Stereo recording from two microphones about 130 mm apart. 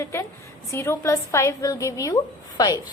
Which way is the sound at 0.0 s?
25° left (ahead or behind).